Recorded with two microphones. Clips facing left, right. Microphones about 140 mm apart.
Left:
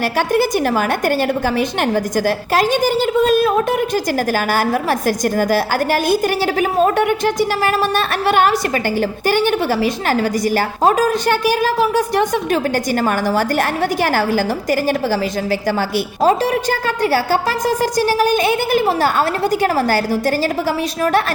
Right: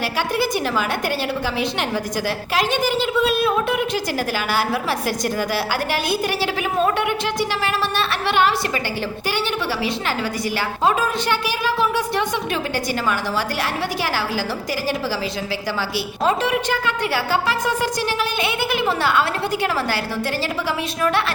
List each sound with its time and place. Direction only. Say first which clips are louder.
0.3 s a woman's voice: left 6 dB; 45° left (ahead or behind)
2.1 s a woman's voice: left 6 dB; 45° left (ahead or behind)
16.2 s a woman's voice: left 5 dB; 40° left (ahead or behind)